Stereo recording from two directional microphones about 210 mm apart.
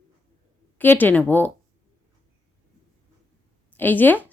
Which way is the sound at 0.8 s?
10° left (ahead or behind).